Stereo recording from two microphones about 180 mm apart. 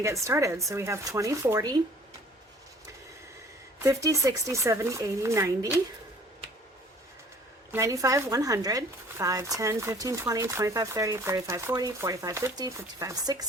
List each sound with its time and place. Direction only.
0.0 s speech: 15° right (ahead or behind)
3.8 s speech: 15° right (ahead or behind)
7.7 s speech: 15° right (ahead or behind)